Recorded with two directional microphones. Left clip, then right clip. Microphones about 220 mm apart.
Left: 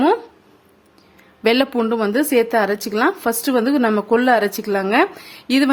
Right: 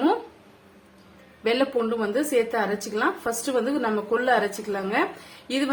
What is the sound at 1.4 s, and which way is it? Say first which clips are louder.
A woman's voice: left 6 dB; 50° left (ahead or behind).